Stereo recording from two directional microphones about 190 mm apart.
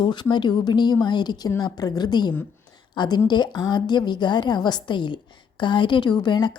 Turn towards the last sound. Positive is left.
turn(degrees=25)  # may be behind; listen again after turning